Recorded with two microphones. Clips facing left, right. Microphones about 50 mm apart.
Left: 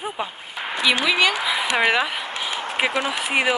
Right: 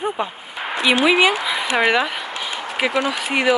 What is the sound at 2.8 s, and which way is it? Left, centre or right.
Speech, centre.